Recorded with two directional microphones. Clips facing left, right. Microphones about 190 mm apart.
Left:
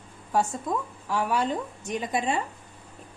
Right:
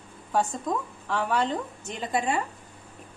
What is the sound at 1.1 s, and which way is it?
A woman's voice, 10° left (ahead or behind).